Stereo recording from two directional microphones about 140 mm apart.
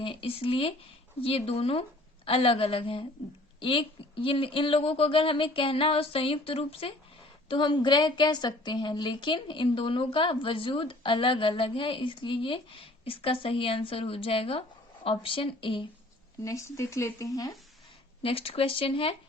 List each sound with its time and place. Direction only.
0.0 s a woman's voice: 40° left (ahead or behind)
16.4 s speech: 20° left (ahead or behind)
18.2 s a woman's voice: 45° left (ahead or behind)